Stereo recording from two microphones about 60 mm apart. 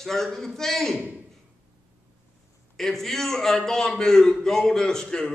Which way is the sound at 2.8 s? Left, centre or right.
Centre.